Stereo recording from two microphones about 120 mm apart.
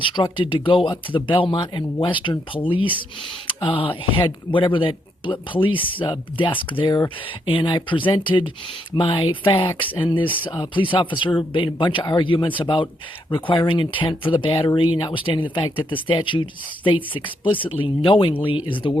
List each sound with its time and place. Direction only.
0.0 s speech: 45° left (ahead or behind)